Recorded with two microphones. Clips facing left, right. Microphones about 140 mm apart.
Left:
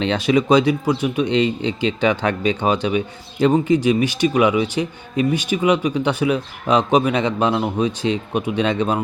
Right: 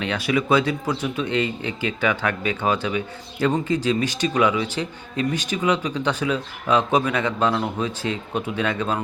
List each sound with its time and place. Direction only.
0.0 s speech: 25° left (ahead or behind)